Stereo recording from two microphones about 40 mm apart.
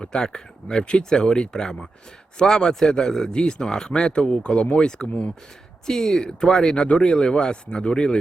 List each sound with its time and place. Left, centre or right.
0.0 s speech: centre
5.8 s speech: centre
6.7 s speech: left